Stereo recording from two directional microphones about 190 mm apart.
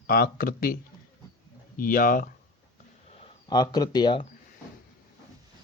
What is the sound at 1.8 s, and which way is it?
Speech, 50° left (ahead or behind).